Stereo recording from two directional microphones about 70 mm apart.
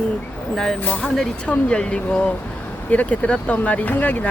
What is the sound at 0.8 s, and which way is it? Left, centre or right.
Speech, left.